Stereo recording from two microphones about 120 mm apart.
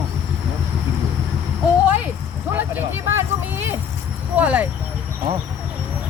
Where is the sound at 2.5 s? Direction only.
15° right (ahead or behind).